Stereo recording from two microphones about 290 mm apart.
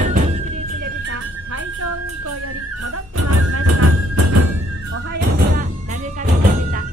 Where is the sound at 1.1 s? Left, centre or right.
Right.